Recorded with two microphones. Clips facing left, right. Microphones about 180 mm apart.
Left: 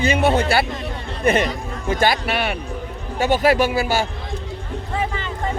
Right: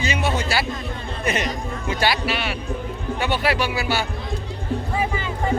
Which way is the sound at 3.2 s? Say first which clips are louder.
Left 7 dB; 45° left (ahead or behind).